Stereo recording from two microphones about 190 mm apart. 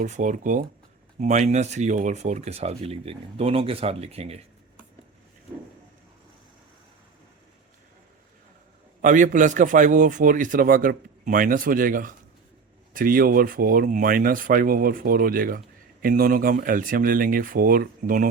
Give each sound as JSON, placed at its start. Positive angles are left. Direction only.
{"t": 0.0, "sound": "speech", "side_deg": -40}
{"t": 9.0, "sound": "speech", "side_deg": -45}